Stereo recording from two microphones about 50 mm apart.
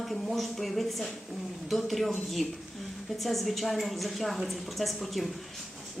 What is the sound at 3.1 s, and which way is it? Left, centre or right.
Speech, centre.